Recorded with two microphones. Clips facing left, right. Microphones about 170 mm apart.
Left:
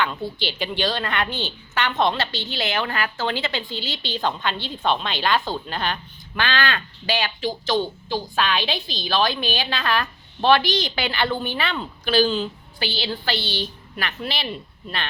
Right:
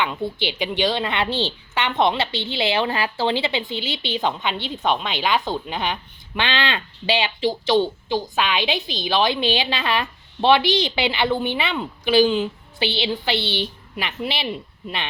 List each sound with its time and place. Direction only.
0.0 s a woman's voice: 20° right (ahead or behind)